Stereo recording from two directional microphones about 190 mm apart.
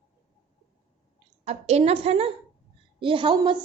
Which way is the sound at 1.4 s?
35° right (ahead or behind).